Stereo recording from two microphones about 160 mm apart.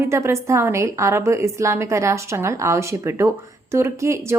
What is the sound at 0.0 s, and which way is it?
A woman's voice, 15° right (ahead or behind).